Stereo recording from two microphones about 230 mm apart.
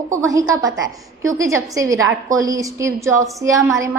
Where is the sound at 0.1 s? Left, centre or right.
Centre.